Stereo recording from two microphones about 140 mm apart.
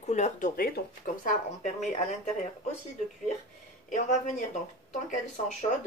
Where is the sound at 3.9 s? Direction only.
55° left (ahead or behind).